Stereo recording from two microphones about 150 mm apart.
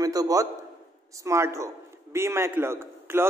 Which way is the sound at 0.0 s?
25° right (ahead or behind).